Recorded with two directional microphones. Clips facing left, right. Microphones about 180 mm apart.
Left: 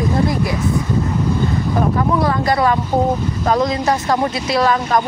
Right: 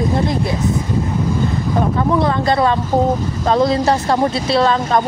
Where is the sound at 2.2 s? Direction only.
25° right (ahead or behind).